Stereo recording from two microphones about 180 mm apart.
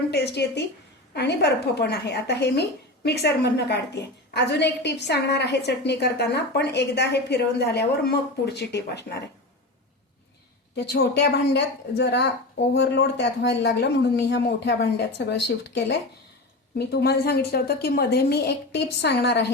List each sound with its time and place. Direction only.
0.1 s a woman's voice: 65° left (ahead or behind)
10.8 s a woman's voice: 70° left (ahead or behind)